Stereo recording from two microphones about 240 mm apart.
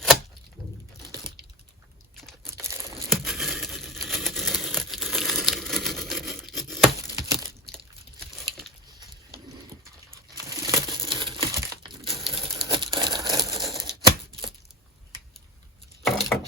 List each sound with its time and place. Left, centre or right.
2.1 s crunch: centre
2.6 s crumpling: centre
3.2 s a sound: centre
7.2 s crumpling: centre
10.1 s crumpling: centre
13.6 s typewriter: centre
13.8 s tearing: centre
16.0 s a sound: centre